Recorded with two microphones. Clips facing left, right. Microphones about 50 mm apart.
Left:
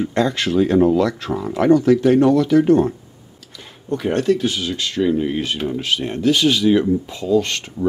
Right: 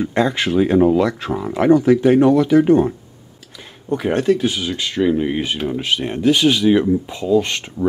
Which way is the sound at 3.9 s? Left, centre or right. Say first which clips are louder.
Right 1 dB; centre.